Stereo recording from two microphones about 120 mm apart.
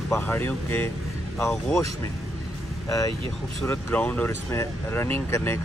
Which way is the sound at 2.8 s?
30° left (ahead or behind).